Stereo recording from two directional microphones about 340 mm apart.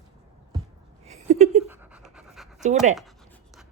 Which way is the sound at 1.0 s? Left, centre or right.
Centre.